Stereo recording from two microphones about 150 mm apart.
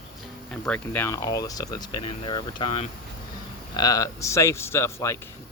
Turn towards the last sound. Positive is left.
turn(degrees=20)  # may be behind; listen again after turning